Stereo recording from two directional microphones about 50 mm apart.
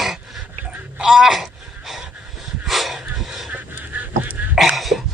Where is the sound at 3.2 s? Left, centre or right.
Centre.